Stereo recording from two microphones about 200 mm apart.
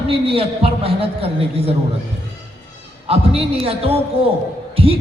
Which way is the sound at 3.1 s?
30° right (ahead or behind).